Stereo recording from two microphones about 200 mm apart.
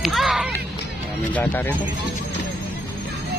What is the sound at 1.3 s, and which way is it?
Speech, 10° left (ahead or behind).